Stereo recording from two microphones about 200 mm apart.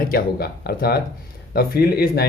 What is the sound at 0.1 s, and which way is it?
Speech, 50° left (ahead or behind).